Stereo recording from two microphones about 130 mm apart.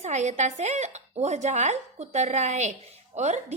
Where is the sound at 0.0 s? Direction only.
60° right (ahead or behind).